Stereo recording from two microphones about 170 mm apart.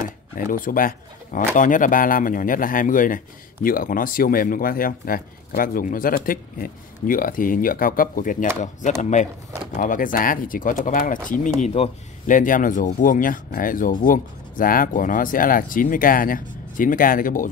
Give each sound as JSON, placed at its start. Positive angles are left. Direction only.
{"t": 0.0, "sound": "speech", "side_deg": 55}
{"t": 9.7, "sound": "speech", "side_deg": 50}
{"t": 12.3, "sound": "speech", "side_deg": 50}